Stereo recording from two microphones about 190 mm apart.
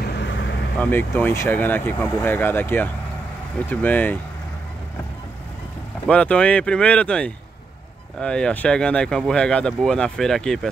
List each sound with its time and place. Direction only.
0.0 s vehicle: 65° left (ahead or behind)
0.8 s speech: 10° left (ahead or behind)
6.0 s speech: 5° left (ahead or behind)